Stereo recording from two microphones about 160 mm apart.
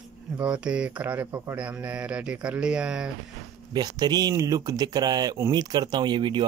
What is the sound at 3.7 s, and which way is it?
Speech, 25° right (ahead or behind).